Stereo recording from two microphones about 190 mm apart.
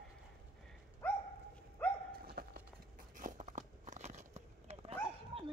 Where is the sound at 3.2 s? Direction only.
40° right (ahead or behind).